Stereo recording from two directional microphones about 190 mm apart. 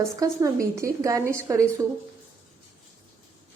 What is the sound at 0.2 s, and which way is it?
A woman's voice, 15° right (ahead or behind).